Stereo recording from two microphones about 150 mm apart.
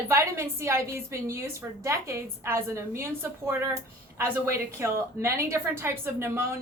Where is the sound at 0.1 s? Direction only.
20° right (ahead or behind).